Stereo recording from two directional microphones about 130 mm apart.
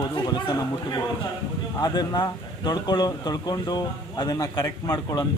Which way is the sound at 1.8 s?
30° left (ahead or behind).